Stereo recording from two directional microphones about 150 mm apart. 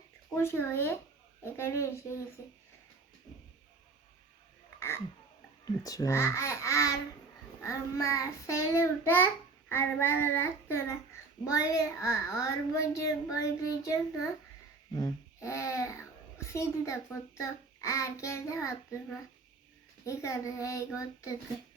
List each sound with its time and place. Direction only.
0.4 s child singing: 15° left (ahead or behind)
4.8 s a sound: 15° left (ahead or behind)
5.6 s a child's voice: 25° left (ahead or behind)
7.6 s child singing: 20° left (ahead or behind)
11.4 s a child's voice: 25° left (ahead or behind)
14.9 s a child's voice: 25° left (ahead or behind)